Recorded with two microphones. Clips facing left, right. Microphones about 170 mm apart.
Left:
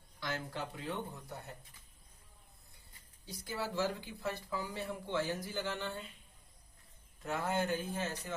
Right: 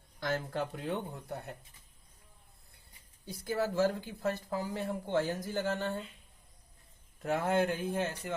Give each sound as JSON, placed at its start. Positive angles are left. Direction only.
{"t": 0.2, "sound": "speech", "side_deg": -50}
{"t": 3.2, "sound": "speech", "side_deg": -55}
{"t": 7.2, "sound": "speech", "side_deg": -55}